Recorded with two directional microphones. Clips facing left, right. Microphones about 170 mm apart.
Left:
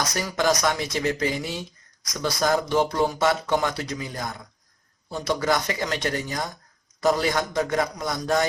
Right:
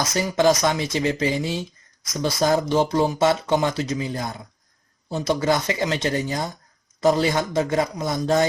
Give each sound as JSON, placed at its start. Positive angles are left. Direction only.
{"t": 0.1, "sound": "speech", "side_deg": -25}